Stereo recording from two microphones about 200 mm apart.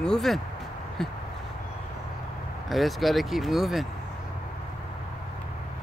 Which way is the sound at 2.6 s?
Centre (ahead or behind).